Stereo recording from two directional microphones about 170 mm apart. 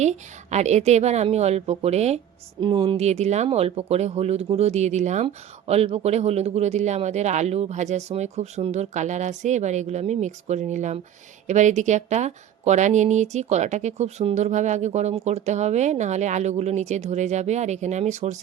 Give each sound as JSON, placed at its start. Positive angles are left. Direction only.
{"t": 0.0, "sound": "a woman's voice", "side_deg": -40}